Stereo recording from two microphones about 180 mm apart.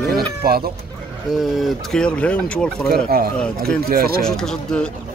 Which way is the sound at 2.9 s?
55° right (ahead or behind).